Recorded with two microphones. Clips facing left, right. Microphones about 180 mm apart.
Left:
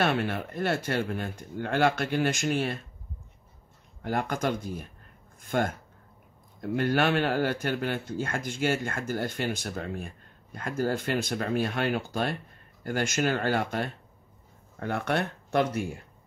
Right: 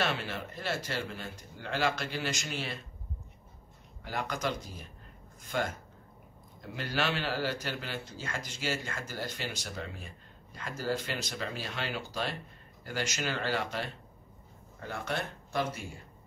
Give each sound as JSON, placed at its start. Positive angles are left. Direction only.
{"t": 0.0, "sound": "speech", "side_deg": 55}
{"t": 4.0, "sound": "speech", "side_deg": 50}
{"t": 14.8, "sound": "speech", "side_deg": 65}